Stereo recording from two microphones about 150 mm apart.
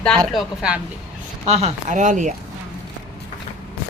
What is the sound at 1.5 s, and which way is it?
Speech, 45° right (ahead or behind).